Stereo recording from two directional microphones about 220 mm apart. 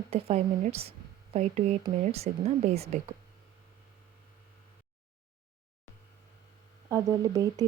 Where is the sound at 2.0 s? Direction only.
30° right (ahead or behind).